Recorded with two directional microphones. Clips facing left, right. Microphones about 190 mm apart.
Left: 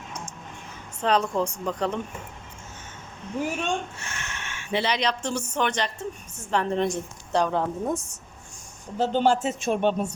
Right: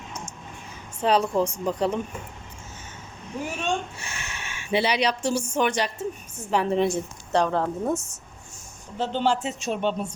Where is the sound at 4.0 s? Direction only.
10° right (ahead or behind).